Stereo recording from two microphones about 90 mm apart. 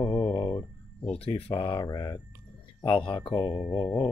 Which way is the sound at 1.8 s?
45° left (ahead or behind).